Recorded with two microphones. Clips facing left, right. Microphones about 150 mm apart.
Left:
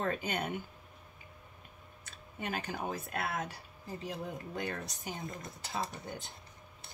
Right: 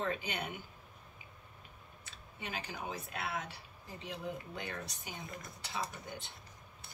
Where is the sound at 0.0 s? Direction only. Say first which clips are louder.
Left 3 dB; 45° left (ahead or behind).